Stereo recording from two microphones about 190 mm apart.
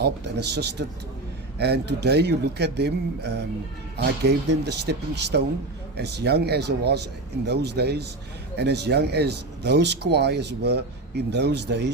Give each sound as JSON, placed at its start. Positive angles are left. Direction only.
{"t": 0.0, "sound": "speech", "side_deg": -60}